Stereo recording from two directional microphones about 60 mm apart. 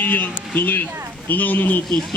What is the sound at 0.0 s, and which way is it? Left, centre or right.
Speech, left.